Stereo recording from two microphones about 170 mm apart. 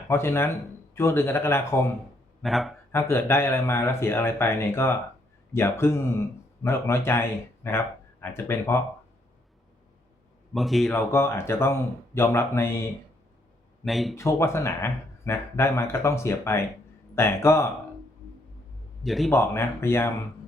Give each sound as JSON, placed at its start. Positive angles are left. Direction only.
{"t": 0.1, "sound": "speech", "side_deg": 15}
{"t": 2.4, "sound": "a man's voice", "side_deg": 0}
{"t": 2.9, "sound": "speech", "side_deg": 15}
{"t": 10.5, "sound": "a man's voice", "side_deg": 0}
{"t": 10.9, "sound": "speech", "side_deg": 15}
{"t": 13.8, "sound": "a man's voice", "side_deg": 0}
{"t": 14.2, "sound": "speech", "side_deg": 15}
{"t": 19.0, "sound": "a man's voice", "side_deg": 0}
{"t": 19.3, "sound": "speech", "side_deg": 15}